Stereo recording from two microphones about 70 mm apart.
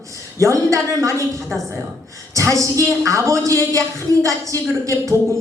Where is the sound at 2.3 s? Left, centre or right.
Right.